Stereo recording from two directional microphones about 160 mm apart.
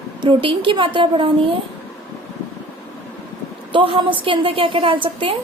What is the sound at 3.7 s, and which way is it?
A woman's voice, 35° right (ahead or behind).